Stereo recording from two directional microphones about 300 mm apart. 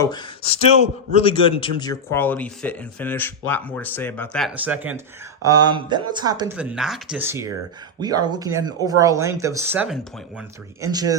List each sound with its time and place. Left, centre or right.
0.0 s speech: centre